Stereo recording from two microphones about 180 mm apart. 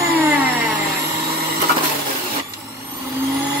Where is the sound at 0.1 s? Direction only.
10° right (ahead or behind).